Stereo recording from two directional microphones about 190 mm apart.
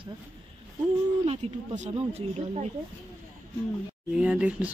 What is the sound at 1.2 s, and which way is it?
Speech, 35° right (ahead or behind).